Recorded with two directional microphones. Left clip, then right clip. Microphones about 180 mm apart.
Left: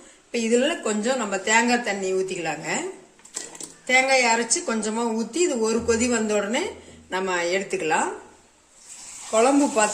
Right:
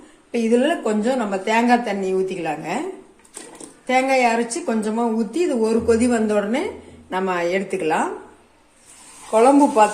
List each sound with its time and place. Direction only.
0.3 s speech: 5° left (ahead or behind)
3.8 s speech: 5° left (ahead or behind)
9.3 s speech: centre (ahead or behind)